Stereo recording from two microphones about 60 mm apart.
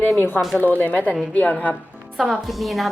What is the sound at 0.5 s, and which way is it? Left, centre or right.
A woman's voice, left.